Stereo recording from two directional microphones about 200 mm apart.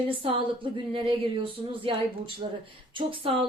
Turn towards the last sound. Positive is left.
turn(degrees=-25)  # may be behind; listen again after turning